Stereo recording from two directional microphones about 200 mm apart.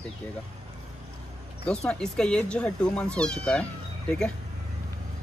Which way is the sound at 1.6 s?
5° left (ahead or behind).